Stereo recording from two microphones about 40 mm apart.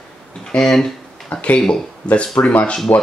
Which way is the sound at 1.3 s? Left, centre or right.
Left.